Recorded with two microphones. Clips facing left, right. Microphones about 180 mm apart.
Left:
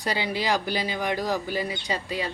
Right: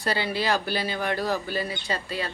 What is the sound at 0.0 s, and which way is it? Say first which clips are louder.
Speech: right 1 dB; 15° left (ahead or behind).